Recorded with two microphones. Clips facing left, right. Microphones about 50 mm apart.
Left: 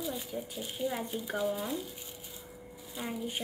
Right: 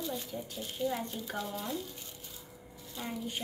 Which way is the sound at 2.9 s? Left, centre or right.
Centre.